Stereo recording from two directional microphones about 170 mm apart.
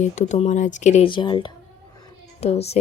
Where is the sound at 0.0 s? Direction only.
45° left (ahead or behind).